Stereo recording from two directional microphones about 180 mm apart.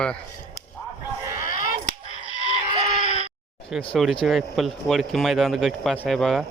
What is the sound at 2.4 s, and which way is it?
Goat, 30° right (ahead or behind).